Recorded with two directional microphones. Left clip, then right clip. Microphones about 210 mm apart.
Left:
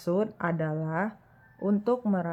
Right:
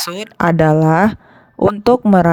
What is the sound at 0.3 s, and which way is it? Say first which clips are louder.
A woman's voice: right 18 dB; 50° right (ahead or behind).